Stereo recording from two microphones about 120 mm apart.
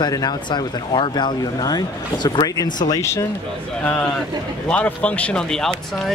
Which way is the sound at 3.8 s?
10° left (ahead or behind).